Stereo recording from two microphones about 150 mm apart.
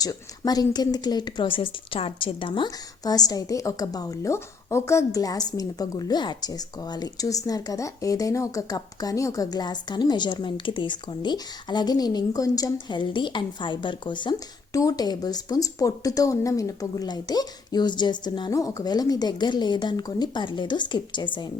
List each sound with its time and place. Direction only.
0.0 s speech: 25° left (ahead or behind)